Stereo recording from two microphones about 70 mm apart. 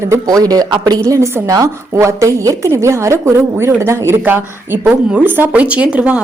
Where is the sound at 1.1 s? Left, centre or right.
Right.